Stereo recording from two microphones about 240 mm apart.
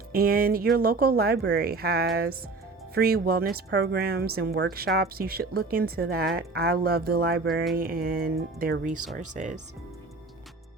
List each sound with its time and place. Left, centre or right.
0.1 s a woman's voice: right